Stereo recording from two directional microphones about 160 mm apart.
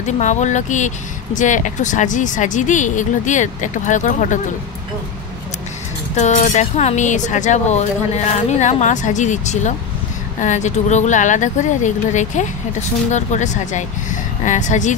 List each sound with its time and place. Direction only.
0.0 s speech: 50° left (ahead or behind)
6.1 s speech: 50° left (ahead or behind)